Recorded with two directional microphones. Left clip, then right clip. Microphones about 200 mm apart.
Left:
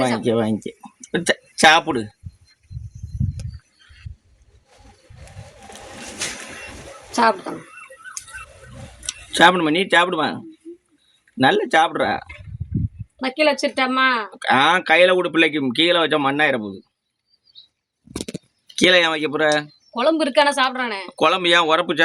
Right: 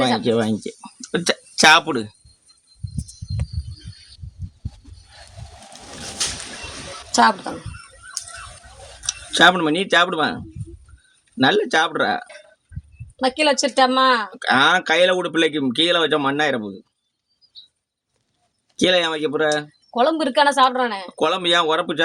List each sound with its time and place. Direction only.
0.0 s speech: centre (ahead or behind)
7.1 s speech: 45° right (ahead or behind)
9.3 s speech: centre (ahead or behind)
13.1 s a woman's voice: 40° right (ahead or behind)
14.4 s speech: centre (ahead or behind)
18.8 s speech: centre (ahead or behind)
19.9 s a woman's voice: 40° right (ahead or behind)
21.1 s speech: centre (ahead or behind)